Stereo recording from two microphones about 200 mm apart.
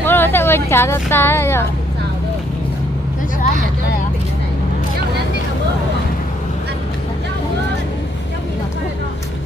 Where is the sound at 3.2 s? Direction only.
40° left (ahead or behind).